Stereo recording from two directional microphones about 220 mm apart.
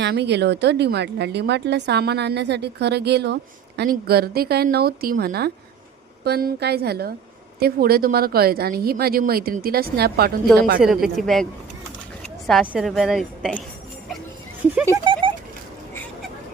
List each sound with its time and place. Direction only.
0.0 s a woman's voice: 50° right (ahead or behind)
10.8 s a woman's voice: centre (ahead or behind)
12.5 s a woman's voice: centre (ahead or behind)
15.0 s a sound: 25° right (ahead or behind)